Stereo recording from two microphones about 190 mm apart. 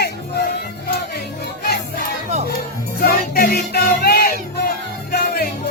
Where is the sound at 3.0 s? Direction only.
50° left (ahead or behind).